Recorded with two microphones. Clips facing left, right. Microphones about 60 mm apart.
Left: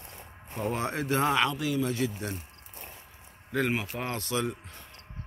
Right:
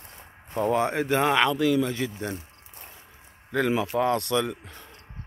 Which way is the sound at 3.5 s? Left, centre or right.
Right.